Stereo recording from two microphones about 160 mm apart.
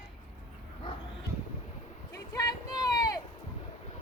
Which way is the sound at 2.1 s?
25° left (ahead or behind).